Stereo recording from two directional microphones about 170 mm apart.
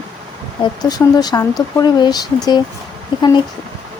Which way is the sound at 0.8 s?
25° left (ahead or behind).